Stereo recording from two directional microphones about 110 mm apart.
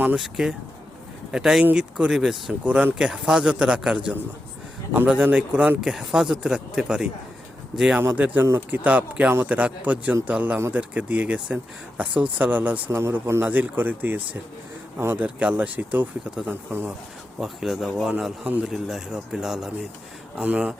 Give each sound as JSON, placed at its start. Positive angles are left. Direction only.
{"t": 0.2, "sound": "a man's voice", "side_deg": -5}